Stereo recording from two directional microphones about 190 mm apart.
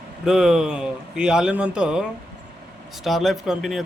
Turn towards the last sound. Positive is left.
turn(degrees=0)  # may be behind; listen again after turning